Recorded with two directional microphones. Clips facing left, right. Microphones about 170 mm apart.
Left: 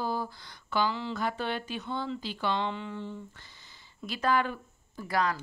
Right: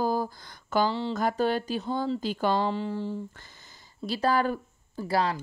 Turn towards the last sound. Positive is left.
turn(degrees=-30)  # may be behind; listen again after turning